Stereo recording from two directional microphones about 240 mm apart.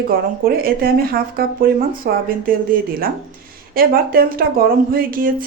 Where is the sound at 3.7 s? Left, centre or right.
Right.